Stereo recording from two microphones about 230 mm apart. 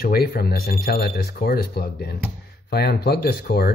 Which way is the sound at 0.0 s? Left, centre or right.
Left.